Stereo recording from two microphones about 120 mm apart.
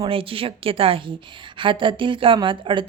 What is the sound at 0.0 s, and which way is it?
A woman's voice, 50° right (ahead or behind).